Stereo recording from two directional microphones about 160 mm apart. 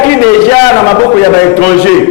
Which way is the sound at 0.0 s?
15° left (ahead or behind).